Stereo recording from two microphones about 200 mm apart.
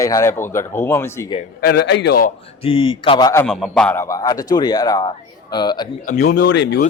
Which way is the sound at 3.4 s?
Centre (ahead or behind).